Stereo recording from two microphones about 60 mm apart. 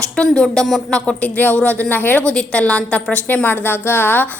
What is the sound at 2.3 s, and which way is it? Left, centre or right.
Speech, centre.